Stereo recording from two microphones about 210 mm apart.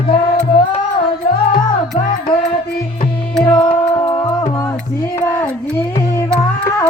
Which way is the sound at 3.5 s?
20° left (ahead or behind).